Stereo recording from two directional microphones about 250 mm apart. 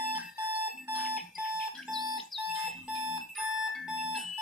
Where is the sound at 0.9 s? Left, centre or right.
Centre.